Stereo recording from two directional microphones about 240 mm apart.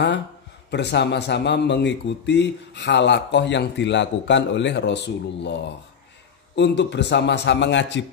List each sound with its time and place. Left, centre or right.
0.7 s speech: left